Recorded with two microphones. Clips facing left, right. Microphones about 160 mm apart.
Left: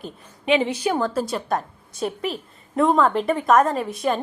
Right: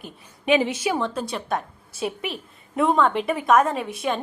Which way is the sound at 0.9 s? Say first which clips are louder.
Left 3 dB; 5° left (ahead or behind).